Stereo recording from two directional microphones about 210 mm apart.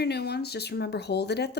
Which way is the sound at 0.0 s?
50° left (ahead or behind).